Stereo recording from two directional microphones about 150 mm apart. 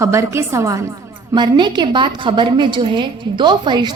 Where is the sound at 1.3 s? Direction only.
30° right (ahead or behind).